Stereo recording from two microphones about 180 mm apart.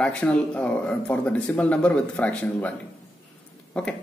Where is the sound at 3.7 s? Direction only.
5° left (ahead or behind).